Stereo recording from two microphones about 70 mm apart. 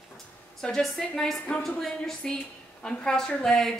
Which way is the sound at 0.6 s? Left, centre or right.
Centre.